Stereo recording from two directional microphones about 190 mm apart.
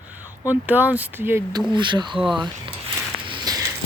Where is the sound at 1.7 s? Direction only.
25° right (ahead or behind).